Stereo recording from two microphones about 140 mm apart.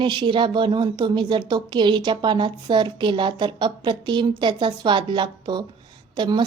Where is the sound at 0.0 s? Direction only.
35° right (ahead or behind).